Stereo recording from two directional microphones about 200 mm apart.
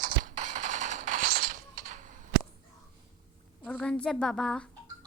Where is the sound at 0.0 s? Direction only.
40° right (ahead or behind).